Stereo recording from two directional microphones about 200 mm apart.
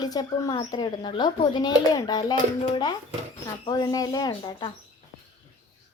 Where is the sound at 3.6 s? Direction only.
20° left (ahead or behind).